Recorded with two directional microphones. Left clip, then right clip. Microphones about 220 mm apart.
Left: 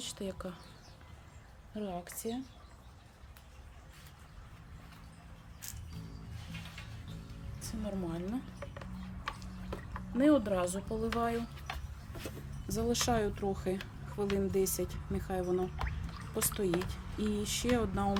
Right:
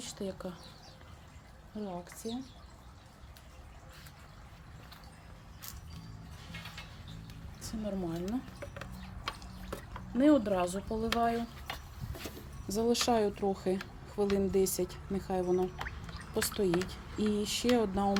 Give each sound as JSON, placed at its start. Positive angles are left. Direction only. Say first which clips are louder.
{"t": 0.0, "sound": "speech", "louder": "right 1 dB", "side_deg": 5}
{"t": 1.8, "sound": "speech", "louder": "left 1 dB", "side_deg": 20}
{"t": 7.6, "sound": "speech", "louder": "right 2 dB", "side_deg": 0}
{"t": 10.2, "sound": "speech", "louder": "right 2 dB", "side_deg": 5}